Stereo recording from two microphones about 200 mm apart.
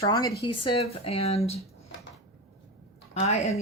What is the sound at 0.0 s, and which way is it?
Speech, 20° left (ahead or behind).